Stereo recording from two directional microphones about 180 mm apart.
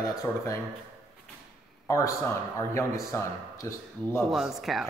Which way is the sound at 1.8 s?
15° left (ahead or behind).